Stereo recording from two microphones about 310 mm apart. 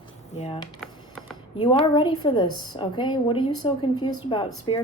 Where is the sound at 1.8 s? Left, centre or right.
Centre.